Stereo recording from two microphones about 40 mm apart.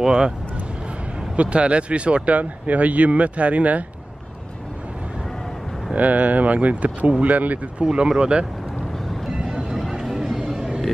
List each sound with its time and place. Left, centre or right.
0.0 s speech: centre
1.3 s speech: right
5.9 s speech: right
7.8 s speech: right
9.3 s vehicle: right
9.8 s a sound: centre